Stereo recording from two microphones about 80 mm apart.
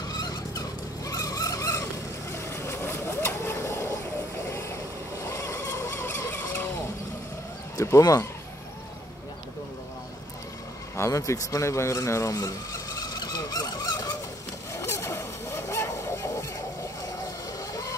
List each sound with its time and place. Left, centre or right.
0.1 s vehicle: left
7.8 s speech: left
11.0 s speech: left
13.1 s squeal: left
14.7 s zipper: left